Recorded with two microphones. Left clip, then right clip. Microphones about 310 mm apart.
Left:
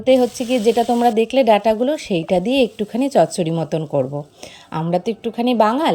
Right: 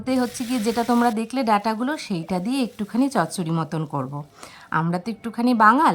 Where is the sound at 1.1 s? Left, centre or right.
Centre.